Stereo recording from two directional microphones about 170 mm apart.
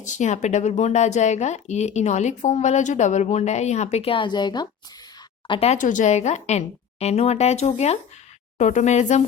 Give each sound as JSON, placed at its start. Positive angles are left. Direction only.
{"t": 0.0, "sound": "speech", "side_deg": 45}
{"t": 5.5, "sound": "speech", "side_deg": 40}